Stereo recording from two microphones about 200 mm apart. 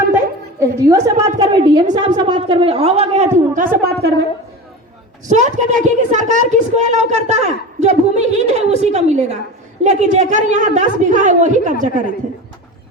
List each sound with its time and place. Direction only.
0.6 s a woman's voice: 15° right (ahead or behind); by 4.1 s 50° right (ahead or behind)
5.3 s a woman's voice: 35° right (ahead or behind)